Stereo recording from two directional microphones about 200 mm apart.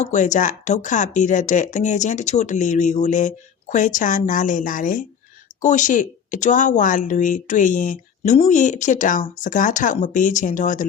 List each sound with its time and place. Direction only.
0.0 s speech: 35° left (ahead or behind)